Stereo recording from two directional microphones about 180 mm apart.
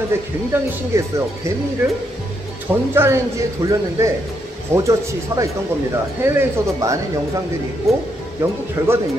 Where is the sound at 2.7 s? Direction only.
10° right (ahead or behind).